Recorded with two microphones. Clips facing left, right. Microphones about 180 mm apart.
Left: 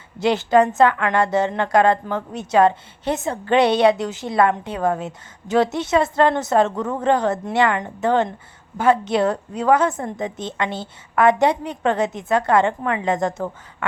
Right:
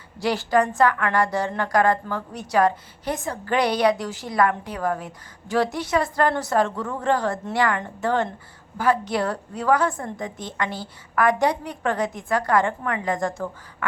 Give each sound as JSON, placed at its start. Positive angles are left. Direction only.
{"t": 0.2, "sound": "a woman's voice", "side_deg": 20}